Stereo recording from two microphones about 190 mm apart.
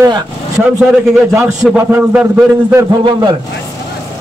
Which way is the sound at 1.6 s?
5° right (ahead or behind).